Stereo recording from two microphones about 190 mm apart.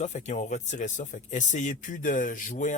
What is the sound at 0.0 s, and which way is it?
Speech, 40° left (ahead or behind).